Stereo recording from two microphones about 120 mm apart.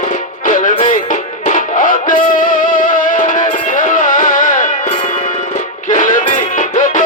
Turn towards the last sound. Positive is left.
turn(degrees=90)